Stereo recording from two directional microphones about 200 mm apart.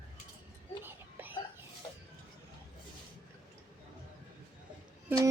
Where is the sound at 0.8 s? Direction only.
10° right (ahead or behind).